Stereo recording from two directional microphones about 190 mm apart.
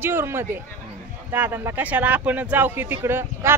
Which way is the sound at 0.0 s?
10° right (ahead or behind).